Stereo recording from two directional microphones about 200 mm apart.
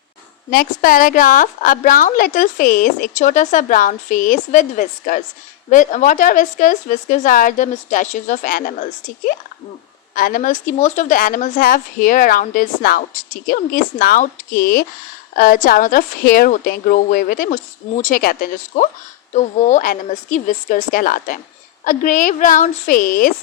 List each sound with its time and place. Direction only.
0.5 s a woman's voice: 45° left (ahead or behind)